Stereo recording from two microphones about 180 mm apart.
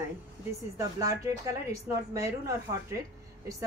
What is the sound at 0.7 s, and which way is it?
A woman's voice, 20° right (ahead or behind).